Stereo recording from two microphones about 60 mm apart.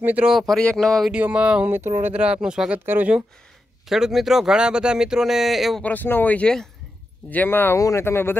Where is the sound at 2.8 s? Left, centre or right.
Right.